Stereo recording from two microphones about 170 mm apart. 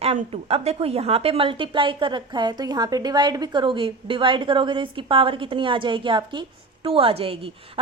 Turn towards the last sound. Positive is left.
turn(degrees=-35)  # may be behind; listen again after turning